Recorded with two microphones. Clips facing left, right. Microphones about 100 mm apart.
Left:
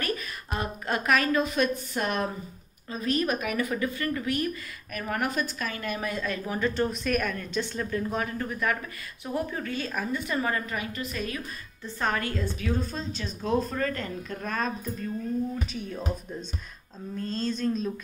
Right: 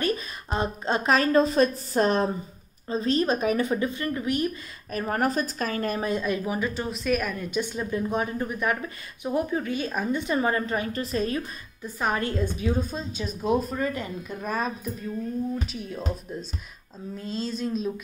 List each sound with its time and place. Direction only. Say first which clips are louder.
0.0 s a woman's voice: right 4 dB; 25° right (ahead or behind)
4.9 s a woman's voice: right 4 dB; 35° right (ahead or behind)
6.0 s a woman's voice: right 5 dB; 20° right (ahead or behind)
11.8 s speech: right 2 dB; 10° right (ahead or behind)
12.2 s speech: right 4 dB; 20° right (ahead or behind)
17.2 s speech: left 1 dB; 5° right (ahead or behind)